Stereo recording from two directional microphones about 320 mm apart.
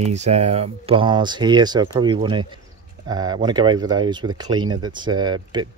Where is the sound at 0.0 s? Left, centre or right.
Right.